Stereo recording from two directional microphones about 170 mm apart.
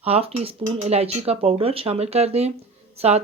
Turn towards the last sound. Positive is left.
turn(degrees=-35)  # may be behind; listen again after turning